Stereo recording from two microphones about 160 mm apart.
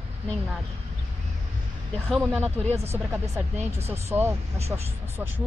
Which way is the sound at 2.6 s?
40° right (ahead or behind).